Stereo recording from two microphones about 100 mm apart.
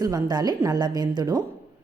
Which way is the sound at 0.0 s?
40° right (ahead or behind).